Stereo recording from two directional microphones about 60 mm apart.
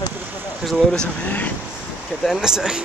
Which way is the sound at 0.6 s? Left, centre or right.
Centre.